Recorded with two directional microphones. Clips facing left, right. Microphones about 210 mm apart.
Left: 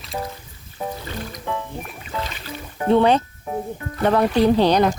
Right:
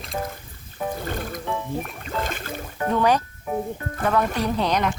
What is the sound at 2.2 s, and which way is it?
Boat, 50° right (ahead or behind).